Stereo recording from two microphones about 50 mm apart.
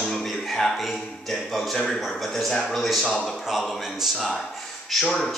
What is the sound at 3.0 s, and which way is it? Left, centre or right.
Speech, left.